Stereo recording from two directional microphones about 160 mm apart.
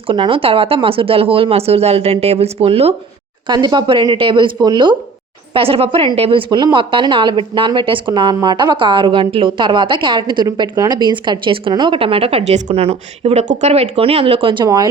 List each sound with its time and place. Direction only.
0.1 s a woman's voice: 35° right (ahead or behind)
3.4 s a woman's voice: 25° right (ahead or behind)